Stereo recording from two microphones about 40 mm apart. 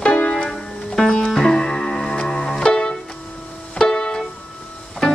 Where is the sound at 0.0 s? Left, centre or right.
Left.